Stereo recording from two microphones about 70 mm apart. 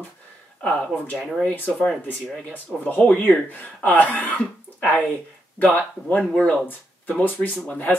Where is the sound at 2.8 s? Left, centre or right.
Left.